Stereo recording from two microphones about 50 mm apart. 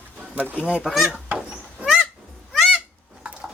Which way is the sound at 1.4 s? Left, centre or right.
Centre.